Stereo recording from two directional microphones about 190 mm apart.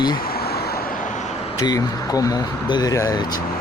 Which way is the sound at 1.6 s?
20° left (ahead or behind).